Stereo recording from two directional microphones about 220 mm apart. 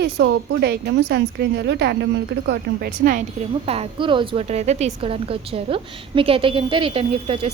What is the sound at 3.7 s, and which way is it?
A woman's voice, 25° right (ahead or behind).